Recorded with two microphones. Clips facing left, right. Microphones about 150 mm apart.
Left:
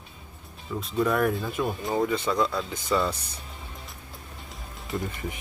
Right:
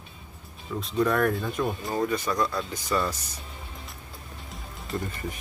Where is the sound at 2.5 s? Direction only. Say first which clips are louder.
Left 2 dB; centre (ahead or behind).